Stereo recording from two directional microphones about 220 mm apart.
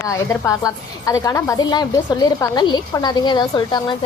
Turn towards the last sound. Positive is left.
turn(degrees=20)  # may be behind; listen again after turning